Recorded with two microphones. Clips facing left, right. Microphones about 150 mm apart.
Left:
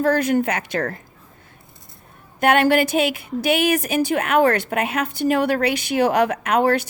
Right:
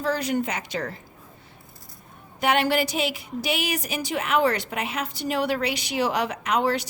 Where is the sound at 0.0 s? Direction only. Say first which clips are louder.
Left 7 dB; 55° left (ahead or behind).